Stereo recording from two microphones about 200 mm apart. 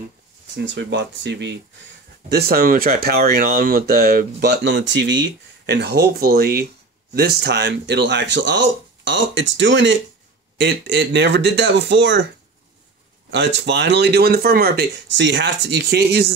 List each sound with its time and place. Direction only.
0.6 s speech: 60° right (ahead or behind)
13.3 s speech: 60° right (ahead or behind)